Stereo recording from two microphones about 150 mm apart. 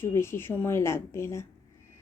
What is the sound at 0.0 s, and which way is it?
A woman's voice, 15° left (ahead or behind).